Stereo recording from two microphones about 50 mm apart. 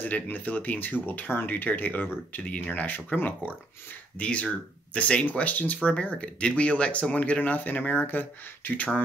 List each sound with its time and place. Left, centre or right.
0.0 s speech: left
4.2 s speech: left